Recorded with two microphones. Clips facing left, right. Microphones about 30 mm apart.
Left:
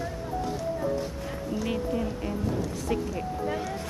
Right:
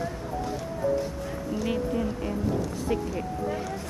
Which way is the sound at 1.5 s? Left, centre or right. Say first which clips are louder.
Right 1 dB; centre.